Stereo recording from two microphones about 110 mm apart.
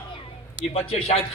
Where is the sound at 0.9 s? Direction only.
65° left (ahead or behind).